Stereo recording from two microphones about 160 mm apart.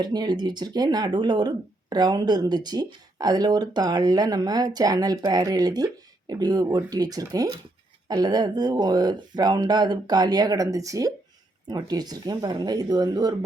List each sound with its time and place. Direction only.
0.0 s speech: 25° right (ahead or behind)